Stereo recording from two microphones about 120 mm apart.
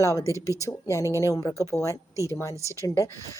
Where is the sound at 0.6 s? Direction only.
25° left (ahead or behind).